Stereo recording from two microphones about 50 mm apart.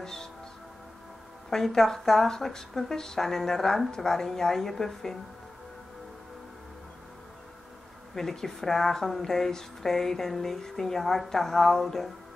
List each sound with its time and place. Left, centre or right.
0.0 s music: centre
1.5 s a woman's voice: centre
8.1 s a woman's voice: centre